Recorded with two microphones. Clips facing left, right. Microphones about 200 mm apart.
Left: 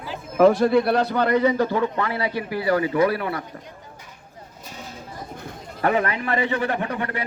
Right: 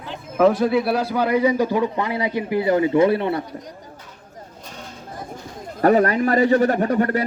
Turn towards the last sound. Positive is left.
turn(degrees=-40)  # may be behind; listen again after turning